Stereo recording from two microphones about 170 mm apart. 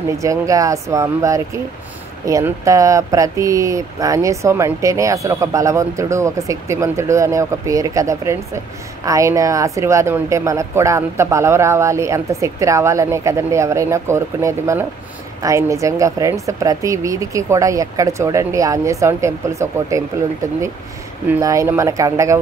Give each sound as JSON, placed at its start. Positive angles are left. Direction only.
{"t": 0.2, "sound": "a woman's voice", "side_deg": -20}
{"t": 21.3, "sound": "speech", "side_deg": -20}